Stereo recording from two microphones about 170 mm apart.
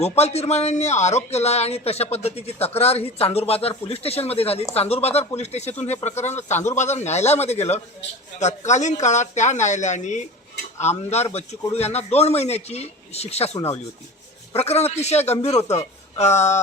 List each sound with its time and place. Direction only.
0.0 s speech: 40° left (ahead or behind)
14.5 s speech: 40° left (ahead or behind)